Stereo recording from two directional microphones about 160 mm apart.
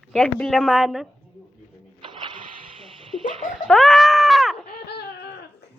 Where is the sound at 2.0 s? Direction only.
30° right (ahead or behind).